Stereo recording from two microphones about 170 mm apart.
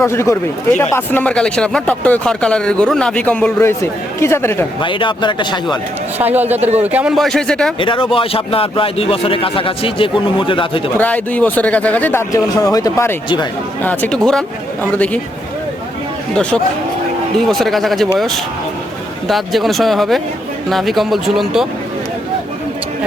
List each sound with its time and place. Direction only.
0.0 s speech: 15° left (ahead or behind)
4.8 s speech: 30° left (ahead or behind)
6.1 s a man's voice: 10° right (ahead or behind)
6.6 s speech: 40° right (ahead or behind)
6.8 s speech: 10° right (ahead or behind)
7.8 s a man's voice: 30° left (ahead or behind)
10.9 s speech: 10° left (ahead or behind)
16.3 s speech: 5° left (ahead or behind)
19.3 s speech: centre (ahead or behind)